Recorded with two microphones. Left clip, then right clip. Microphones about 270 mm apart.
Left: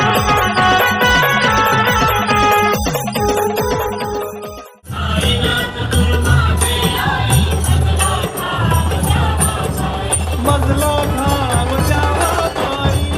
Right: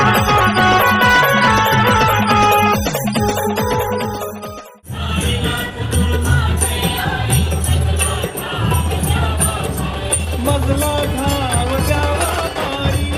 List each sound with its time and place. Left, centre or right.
0.0 s music: centre
11.8 s music: left